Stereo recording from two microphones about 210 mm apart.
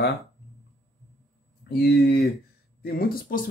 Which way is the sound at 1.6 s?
50° left (ahead or behind).